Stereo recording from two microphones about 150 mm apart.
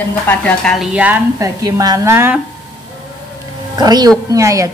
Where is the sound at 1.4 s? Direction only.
25° right (ahead or behind).